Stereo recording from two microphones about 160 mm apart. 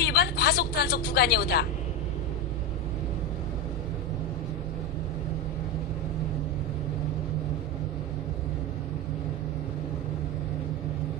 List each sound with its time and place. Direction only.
0.0 s speech: 90° left